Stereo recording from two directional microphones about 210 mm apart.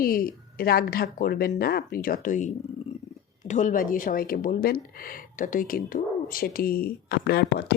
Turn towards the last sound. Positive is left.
turn(degrees=50)  # may be behind; listen again after turning